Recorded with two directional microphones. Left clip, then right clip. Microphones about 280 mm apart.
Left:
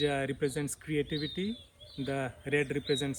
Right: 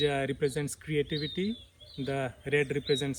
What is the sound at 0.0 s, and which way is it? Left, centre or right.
Speech, centre.